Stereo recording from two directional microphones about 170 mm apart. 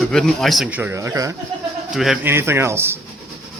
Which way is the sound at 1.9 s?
Centre (ahead or behind).